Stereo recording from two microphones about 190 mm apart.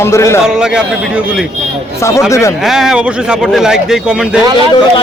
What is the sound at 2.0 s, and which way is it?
Speech, 15° left (ahead or behind).